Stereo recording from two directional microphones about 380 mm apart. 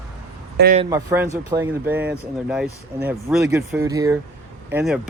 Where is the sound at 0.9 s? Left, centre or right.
Centre.